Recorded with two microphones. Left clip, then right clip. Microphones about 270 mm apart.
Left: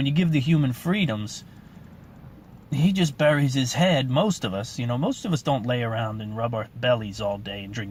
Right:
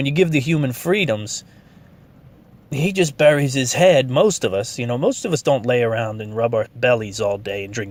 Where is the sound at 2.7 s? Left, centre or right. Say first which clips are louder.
Right 7 dB; right.